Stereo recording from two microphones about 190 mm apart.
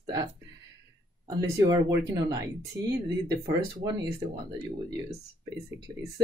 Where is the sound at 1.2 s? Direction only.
15° right (ahead or behind).